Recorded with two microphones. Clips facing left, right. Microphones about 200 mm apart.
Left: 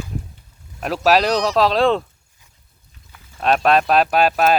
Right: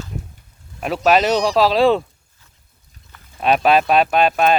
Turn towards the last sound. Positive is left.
turn(degrees=5)  # may be behind; listen again after turning